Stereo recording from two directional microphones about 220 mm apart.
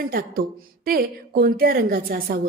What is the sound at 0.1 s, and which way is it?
A woman's voice, 40° right (ahead or behind).